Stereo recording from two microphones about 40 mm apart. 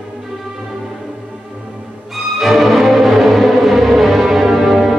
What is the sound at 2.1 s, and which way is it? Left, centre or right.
Music, centre.